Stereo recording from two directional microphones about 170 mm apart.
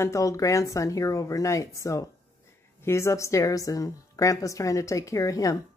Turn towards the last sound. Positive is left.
turn(degrees=20)  # may be behind; listen again after turning